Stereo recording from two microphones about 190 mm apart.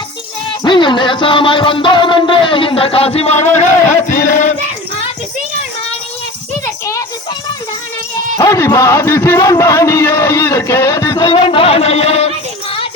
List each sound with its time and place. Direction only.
0.6 s music: 25° left (ahead or behind); by 4.5 s 40° left (ahead or behind)
8.4 s a man's voice: 15° left (ahead or behind)
11.3 s a sound: 25° left (ahead or behind)